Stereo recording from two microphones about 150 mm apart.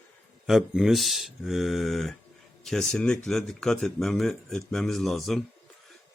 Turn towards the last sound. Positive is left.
turn(degrees=0)  # may be behind; listen again after turning